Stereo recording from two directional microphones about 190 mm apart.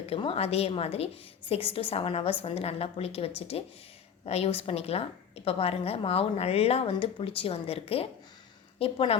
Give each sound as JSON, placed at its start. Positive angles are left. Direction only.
{"t": 0.1, "sound": "a woman's voice", "side_deg": 30}